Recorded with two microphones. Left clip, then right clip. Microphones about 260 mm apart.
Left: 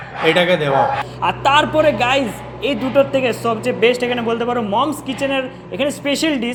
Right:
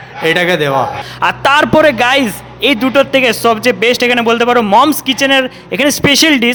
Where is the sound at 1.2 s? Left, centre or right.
Right.